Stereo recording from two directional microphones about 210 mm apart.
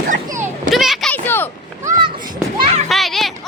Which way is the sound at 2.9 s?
Centre (ahead or behind).